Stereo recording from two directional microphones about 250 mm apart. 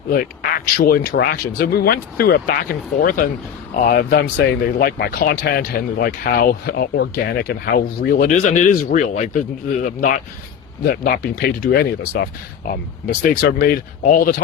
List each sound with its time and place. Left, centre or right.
0.8 s speech: left